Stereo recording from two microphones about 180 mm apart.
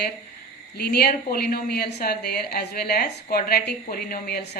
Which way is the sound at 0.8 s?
60° left (ahead or behind).